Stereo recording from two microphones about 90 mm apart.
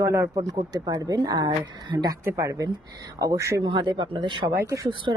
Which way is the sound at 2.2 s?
35° right (ahead or behind).